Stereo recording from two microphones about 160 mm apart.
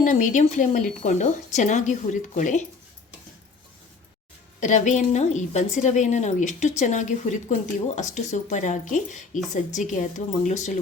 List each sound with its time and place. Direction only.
0.0 s speech: 50° left (ahead or behind)
4.6 s speech: 50° left (ahead or behind)